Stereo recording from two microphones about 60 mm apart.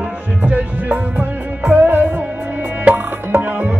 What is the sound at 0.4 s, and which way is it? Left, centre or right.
Music, right.